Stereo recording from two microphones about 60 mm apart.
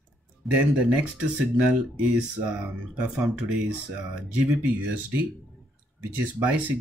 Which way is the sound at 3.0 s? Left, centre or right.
Centre.